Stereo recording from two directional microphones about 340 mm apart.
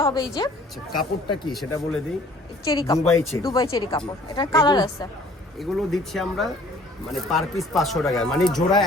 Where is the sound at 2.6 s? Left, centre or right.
Centre.